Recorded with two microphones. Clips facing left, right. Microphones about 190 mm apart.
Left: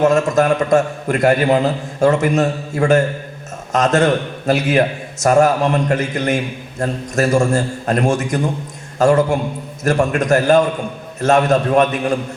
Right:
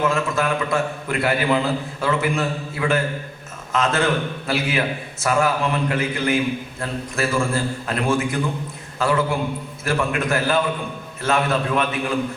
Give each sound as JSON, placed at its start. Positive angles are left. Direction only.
{"t": 0.0, "sound": "a man's voice", "side_deg": 40}